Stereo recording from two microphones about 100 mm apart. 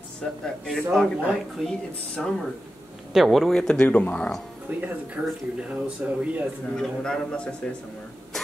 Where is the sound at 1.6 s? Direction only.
Centre (ahead or behind).